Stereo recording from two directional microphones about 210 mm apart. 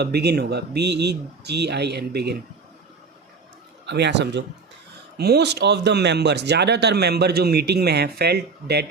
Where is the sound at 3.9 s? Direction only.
55° right (ahead or behind).